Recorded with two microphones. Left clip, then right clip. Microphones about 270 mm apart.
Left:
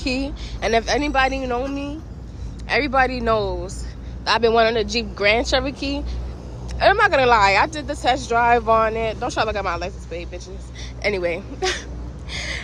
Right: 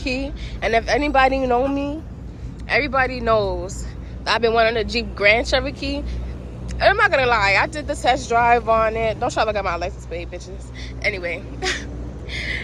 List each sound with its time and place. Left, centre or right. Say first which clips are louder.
0.0 s a woman's voice: even; centre
12.3 s gasp: right 2 dB; centre